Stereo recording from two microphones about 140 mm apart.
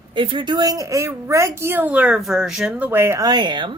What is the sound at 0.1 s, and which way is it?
A woman's voice, 35° right (ahead or behind).